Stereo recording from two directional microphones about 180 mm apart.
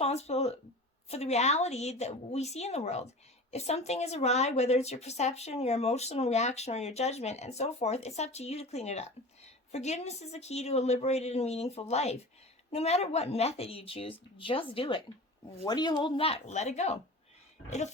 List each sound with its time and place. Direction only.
0.0 s speech: 35° left (ahead or behind)